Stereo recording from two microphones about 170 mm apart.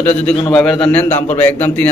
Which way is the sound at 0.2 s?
5° left (ahead or behind).